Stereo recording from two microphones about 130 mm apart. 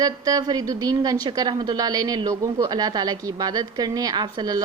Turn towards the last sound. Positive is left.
turn(degrees=-35)  # may be behind; listen again after turning